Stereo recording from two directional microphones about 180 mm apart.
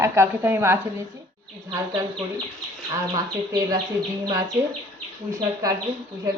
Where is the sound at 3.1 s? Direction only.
20° right (ahead or behind).